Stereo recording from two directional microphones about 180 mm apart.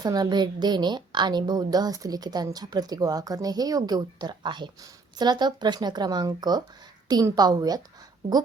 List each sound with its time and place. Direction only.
0.0 s a woman's voice: 20° right (ahead or behind)